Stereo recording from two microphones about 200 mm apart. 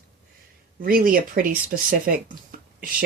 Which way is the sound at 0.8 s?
45° right (ahead or behind).